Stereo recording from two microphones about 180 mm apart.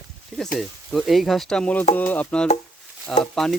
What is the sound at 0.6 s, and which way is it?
Speech, centre (ahead or behind).